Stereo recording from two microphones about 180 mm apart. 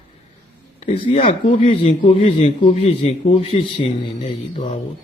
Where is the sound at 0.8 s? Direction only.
35° left (ahead or behind).